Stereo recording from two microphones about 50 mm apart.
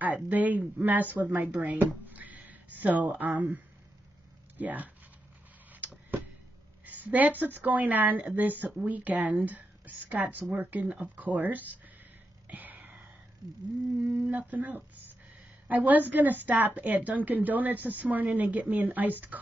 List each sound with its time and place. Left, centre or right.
0.0 s a woman's voice: right
2.1 s a sound: right
4.6 s a woman's voice: right
6.9 s a woman's voice: right
12.4 s a sound: right
14.2 s a woman's voice: right